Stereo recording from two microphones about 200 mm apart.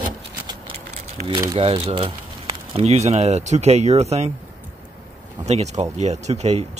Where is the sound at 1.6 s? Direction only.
30° right (ahead or behind).